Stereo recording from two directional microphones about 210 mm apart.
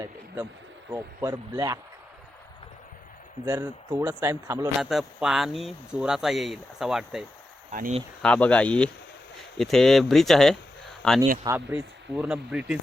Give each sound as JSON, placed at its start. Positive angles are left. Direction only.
{"t": 0.9, "sound": "speech", "side_deg": -15}
{"t": 3.4, "sound": "speech", "side_deg": -15}
{"t": 4.8, "sound": "speech", "side_deg": 0}
{"t": 7.7, "sound": "speech", "side_deg": -35}
{"t": 8.2, "sound": "speech", "side_deg": 5}